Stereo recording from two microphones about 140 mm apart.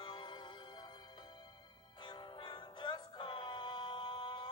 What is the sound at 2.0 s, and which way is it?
Music, 35° left (ahead or behind).